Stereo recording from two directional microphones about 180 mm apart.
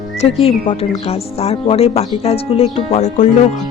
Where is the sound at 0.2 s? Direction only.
35° left (ahead or behind).